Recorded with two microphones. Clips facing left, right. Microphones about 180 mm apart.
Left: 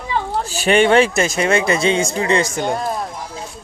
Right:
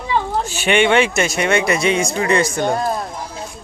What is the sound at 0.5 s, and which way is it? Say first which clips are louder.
Speech: left 2 dB; 35° left (ahead or behind).